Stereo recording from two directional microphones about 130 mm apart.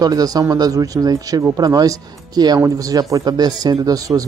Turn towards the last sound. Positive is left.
turn(degrees=-30)  # may be behind; listen again after turning